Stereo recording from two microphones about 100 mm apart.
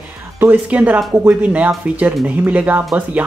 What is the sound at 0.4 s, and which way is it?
Speech, 15° right (ahead or behind).